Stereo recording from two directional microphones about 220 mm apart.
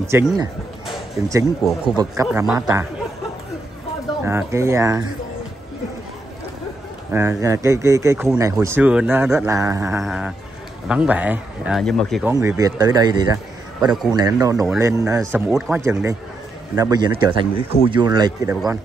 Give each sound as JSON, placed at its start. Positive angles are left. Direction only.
{"t": 0.0, "sound": "a man's voice", "side_deg": -10}
{"t": 2.2, "sound": "a man's voice", "side_deg": -5}
{"t": 4.2, "sound": "a man's voice", "side_deg": -10}
{"t": 7.1, "sound": "a man's voice", "side_deg": -10}
{"t": 12.3, "sound": "a man's voice", "side_deg": -15}
{"t": 13.7, "sound": "a man's voice", "side_deg": 0}
{"t": 14.1, "sound": "a man's voice", "side_deg": -15}